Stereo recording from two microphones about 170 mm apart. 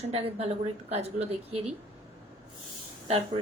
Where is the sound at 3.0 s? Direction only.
35° right (ahead or behind).